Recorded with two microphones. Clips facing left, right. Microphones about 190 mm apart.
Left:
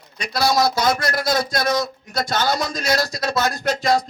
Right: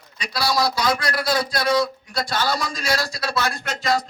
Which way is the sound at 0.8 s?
45° left (ahead or behind).